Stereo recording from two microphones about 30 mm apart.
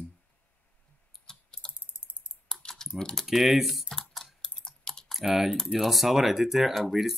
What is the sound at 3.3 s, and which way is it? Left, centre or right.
Speech, centre.